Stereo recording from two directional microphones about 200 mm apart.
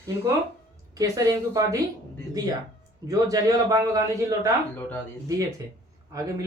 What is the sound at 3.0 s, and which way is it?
Speech, 15° right (ahead or behind).